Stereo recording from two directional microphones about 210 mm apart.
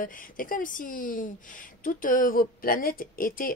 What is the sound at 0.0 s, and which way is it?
Speech, 40° left (ahead or behind).